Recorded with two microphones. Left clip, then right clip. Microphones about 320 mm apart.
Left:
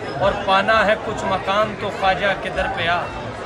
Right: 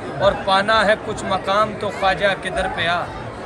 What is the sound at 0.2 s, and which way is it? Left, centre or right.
Music, centre.